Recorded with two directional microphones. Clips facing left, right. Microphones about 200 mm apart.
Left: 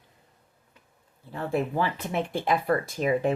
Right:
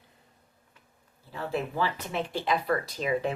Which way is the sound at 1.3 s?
50° left (ahead or behind).